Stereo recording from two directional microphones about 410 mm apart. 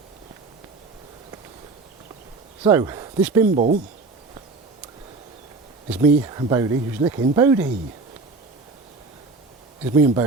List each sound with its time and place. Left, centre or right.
2.6 s speech: centre
3.4 s speech: centre
5.9 s speech: centre
9.8 s speech: centre